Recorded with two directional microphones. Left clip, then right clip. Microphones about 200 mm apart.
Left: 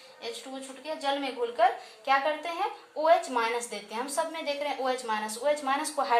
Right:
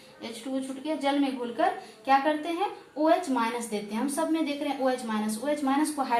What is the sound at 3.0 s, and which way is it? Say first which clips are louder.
A woman's voice: left 1 dB; 30° left (ahead or behind).